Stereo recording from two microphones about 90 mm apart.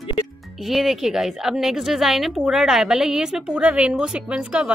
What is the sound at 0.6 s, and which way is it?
A woman's voice, centre (ahead or behind).